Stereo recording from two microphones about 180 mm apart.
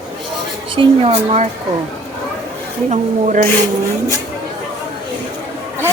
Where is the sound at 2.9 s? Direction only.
45° right (ahead or behind).